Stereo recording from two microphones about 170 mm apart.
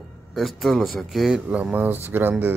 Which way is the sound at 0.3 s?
Centre (ahead or behind).